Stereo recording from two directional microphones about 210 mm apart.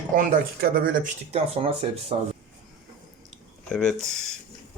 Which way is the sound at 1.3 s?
30° right (ahead or behind).